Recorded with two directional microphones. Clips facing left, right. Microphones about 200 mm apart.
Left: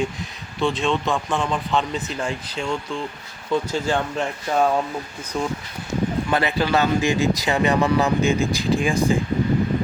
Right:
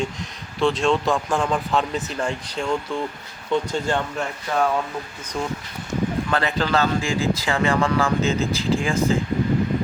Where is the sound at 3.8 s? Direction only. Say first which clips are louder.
Left 1 dB; 15° left (ahead or behind).